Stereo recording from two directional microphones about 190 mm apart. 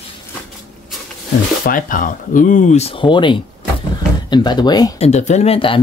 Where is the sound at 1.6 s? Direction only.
45° left (ahead or behind); by 4.9 s 20° left (ahead or behind).